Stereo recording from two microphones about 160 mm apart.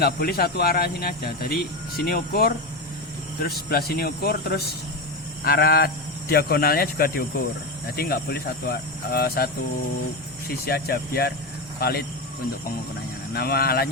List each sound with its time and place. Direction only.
0.0 s speech: 75° left (ahead or behind)
10.5 s speech: 80° left
13.3 s speech: 80° left